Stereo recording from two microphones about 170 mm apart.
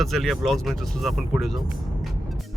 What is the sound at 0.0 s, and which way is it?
Speech, centre (ahead or behind).